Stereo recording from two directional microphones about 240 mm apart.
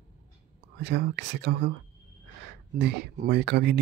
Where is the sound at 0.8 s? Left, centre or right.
Right.